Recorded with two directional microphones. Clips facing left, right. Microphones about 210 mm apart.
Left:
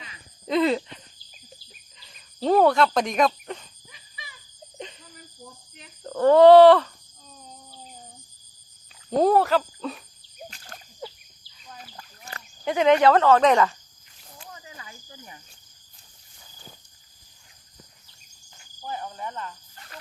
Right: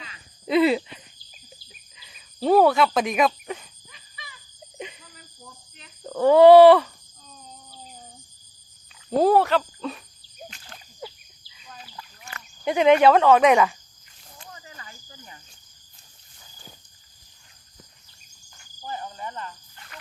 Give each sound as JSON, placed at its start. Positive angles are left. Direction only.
{"t": 0.4, "sound": "a sound", "side_deg": -10}
{"t": 2.0, "sound": "speech", "side_deg": -5}
{"t": 4.8, "sound": "a sound", "side_deg": -10}
{"t": 6.0, "sound": "speech", "side_deg": -10}
{"t": 9.0, "sound": "speech", "side_deg": 0}
{"t": 10.5, "sound": "a sound", "side_deg": 40}
{"t": 11.8, "sound": "chicken", "side_deg": 45}
{"t": 12.6, "sound": "speech", "side_deg": -15}
{"t": 14.7, "sound": "cricket", "side_deg": 10}
{"t": 18.9, "sound": "cricket", "side_deg": 0}
{"t": 19.9, "sound": "wild animals", "side_deg": 35}